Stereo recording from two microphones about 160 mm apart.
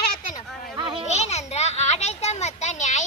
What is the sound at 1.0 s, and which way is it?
Children playing, 45° left (ahead or behind).